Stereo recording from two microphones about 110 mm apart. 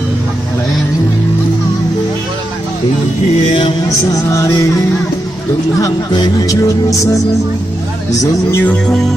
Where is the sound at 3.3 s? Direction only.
70° left (ahead or behind).